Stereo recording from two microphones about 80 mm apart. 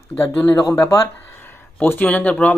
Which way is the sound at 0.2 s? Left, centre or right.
Left.